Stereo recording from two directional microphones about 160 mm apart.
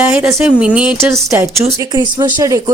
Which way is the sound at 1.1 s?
20° right (ahead or behind).